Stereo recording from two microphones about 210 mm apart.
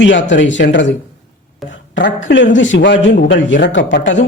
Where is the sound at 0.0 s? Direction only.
60° left (ahead or behind).